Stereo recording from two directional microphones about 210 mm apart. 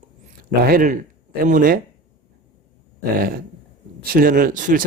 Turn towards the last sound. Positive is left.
turn(degrees=-40)  # may be behind; listen again after turning